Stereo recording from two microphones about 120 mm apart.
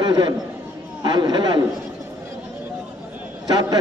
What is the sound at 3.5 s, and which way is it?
Speech, 35° right (ahead or behind).